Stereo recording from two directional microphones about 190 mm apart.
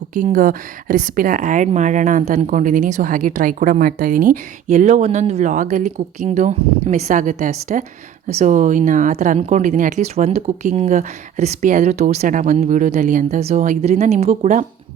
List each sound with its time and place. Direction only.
0.1 s speech: 45° right (ahead or behind)